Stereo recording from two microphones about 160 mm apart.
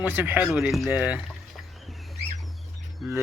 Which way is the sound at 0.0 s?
10° right (ahead or behind).